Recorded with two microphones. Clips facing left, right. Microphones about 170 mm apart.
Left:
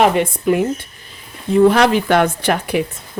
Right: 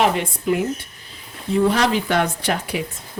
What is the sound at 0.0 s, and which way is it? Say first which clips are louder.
Speech: left 5 dB; 55° left (ahead or behind).